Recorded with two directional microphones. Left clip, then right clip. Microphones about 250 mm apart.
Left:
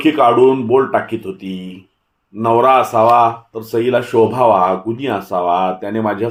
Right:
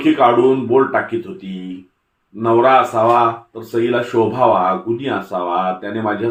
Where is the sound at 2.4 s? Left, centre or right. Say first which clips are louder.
Left 1 dB; left.